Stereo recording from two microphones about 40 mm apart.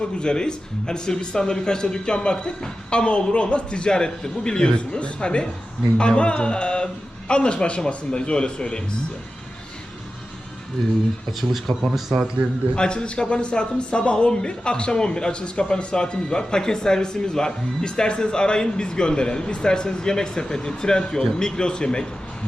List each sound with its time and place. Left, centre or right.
0.0 s speech: left
11.3 s speech: centre
12.7 s speech: left